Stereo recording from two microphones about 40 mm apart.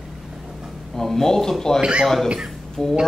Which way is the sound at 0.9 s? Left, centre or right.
Centre.